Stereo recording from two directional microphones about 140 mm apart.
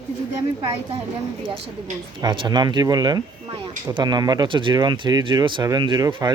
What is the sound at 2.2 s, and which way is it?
Speech, 35° right (ahead or behind).